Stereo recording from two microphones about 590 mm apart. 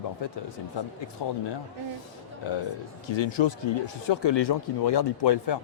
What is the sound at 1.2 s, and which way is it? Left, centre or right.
Speech, left.